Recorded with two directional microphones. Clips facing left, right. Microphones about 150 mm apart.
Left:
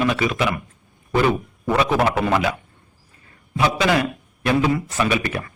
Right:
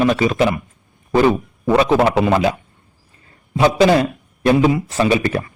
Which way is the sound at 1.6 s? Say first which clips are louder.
Right 5 dB; 25° right (ahead or behind).